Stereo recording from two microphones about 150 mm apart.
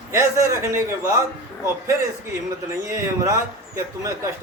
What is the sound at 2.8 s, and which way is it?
A man's voice, 20° right (ahead or behind).